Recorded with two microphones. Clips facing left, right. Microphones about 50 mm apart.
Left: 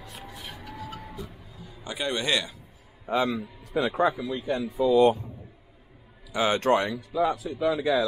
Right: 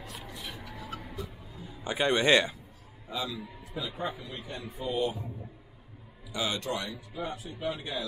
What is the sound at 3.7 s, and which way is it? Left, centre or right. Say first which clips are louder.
Speech: left 12 dB; left.